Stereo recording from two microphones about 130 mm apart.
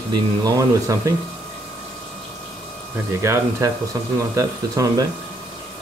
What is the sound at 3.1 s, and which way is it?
Speech, 20° right (ahead or behind).